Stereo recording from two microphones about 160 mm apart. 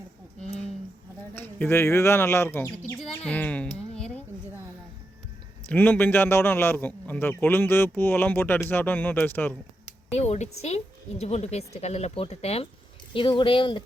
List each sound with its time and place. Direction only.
1.3 s a man's voice: 10° left (ahead or behind)
3.0 s a sound: 10° left (ahead or behind)
5.6 s a man's voice: 10° left (ahead or behind)
10.2 s speech: 45° left (ahead or behind)